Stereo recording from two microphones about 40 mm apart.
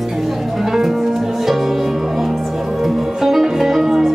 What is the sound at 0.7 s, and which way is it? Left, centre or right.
Music, centre.